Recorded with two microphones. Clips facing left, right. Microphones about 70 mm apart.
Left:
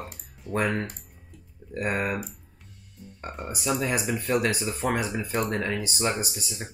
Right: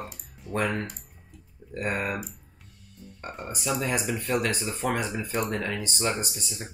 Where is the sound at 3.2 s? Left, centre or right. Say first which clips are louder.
Left 2 dB; centre.